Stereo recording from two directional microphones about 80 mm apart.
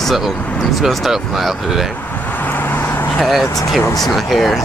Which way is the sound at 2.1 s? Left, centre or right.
Left.